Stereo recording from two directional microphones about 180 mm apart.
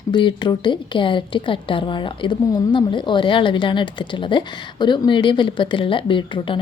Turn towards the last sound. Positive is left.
turn(degrees=25)  # may be behind; listen again after turning